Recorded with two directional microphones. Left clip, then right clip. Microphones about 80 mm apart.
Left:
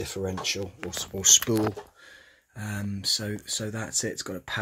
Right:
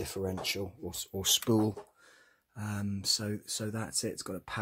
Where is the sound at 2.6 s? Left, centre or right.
Centre.